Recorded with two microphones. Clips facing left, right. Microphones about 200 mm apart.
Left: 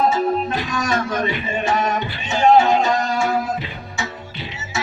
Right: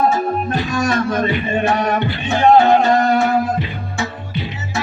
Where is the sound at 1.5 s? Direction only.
60° right (ahead or behind).